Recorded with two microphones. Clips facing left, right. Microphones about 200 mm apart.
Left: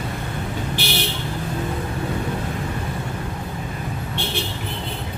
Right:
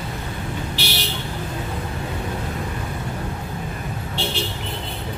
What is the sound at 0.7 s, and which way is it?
Vehicle, 50° left (ahead or behind).